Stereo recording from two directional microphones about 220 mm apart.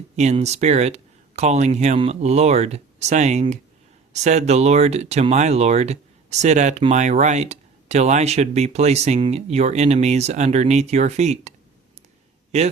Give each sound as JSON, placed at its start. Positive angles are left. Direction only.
{"t": 0.2, "sound": "speech", "side_deg": -30}